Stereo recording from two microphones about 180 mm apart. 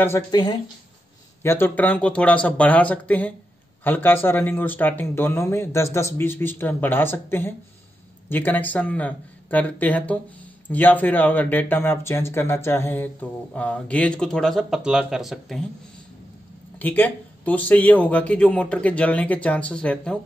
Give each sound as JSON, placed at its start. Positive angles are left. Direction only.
{"t": 0.0, "sound": "speech", "side_deg": 20}
{"t": 16.7, "sound": "speech", "side_deg": 10}